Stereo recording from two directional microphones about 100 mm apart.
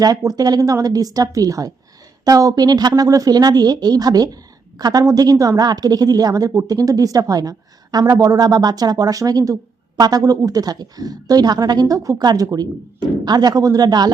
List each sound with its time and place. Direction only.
0.0 s a woman's voice: 35° right (ahead or behind)